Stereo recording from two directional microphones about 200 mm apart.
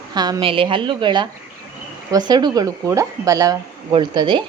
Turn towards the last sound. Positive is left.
turn(degrees=-25)  # may be behind; listen again after turning